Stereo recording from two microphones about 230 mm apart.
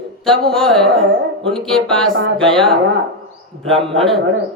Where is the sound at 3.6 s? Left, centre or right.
Right.